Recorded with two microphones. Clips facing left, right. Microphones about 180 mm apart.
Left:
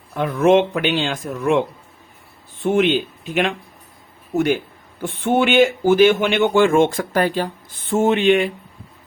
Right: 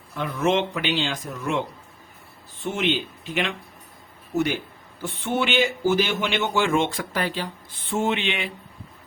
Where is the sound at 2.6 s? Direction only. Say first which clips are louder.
Left 8 dB; 55° left (ahead or behind).